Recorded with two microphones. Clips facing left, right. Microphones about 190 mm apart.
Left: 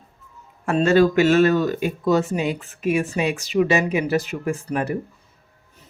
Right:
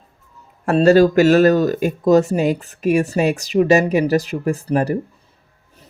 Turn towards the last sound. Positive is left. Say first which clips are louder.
# right 5 dB
turn(degrees=-35)  # may be behind; listen again after turning